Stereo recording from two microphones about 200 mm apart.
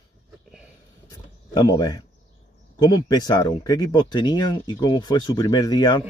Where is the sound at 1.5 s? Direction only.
20° left (ahead or behind).